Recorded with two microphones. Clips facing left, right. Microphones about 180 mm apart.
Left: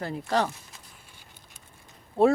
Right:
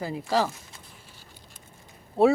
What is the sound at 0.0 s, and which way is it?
Speech, 5° right (ahead or behind).